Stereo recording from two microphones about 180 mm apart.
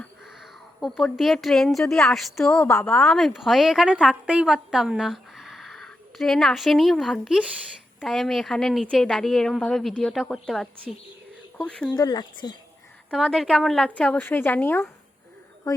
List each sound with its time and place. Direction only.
0.8 s a woman's voice: centre (ahead or behind)
2.6 s a woman's voice: 15° left (ahead or behind)
2.9 s a woman's voice: centre (ahead or behind)
11.9 s speech: 20° left (ahead or behind)
13.1 s a woman's voice: centre (ahead or behind); by 15.8 s 20° left (ahead or behind)